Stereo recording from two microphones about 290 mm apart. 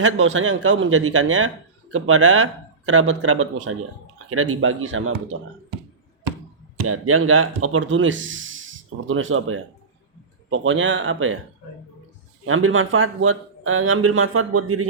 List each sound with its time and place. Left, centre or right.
0.0 s speech: right
6.7 s speech: right
12.5 s speech: right